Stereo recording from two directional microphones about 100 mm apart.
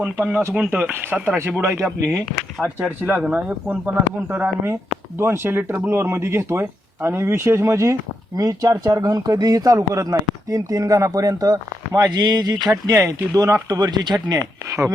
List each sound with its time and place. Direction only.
0.0 s speech: 15° right (ahead or behind)
2.8 s speech: 15° right (ahead or behind); by 12.7 s 45° right (ahead or behind)
12.7 s speech: 30° right (ahead or behind)